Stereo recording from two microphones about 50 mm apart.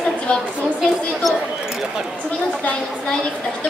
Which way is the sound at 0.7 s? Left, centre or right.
Centre.